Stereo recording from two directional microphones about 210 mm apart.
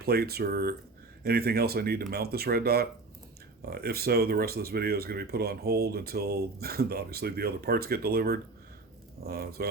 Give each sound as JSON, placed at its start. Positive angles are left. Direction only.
{"t": 0.0, "sound": "speech", "side_deg": -50}